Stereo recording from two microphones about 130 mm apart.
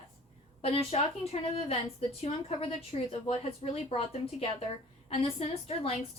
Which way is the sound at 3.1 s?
50° left (ahead or behind).